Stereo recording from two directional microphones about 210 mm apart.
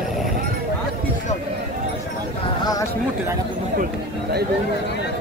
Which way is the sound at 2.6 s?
15° left (ahead or behind).